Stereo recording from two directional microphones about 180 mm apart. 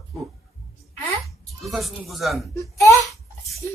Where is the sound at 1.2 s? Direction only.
Centre (ahead or behind).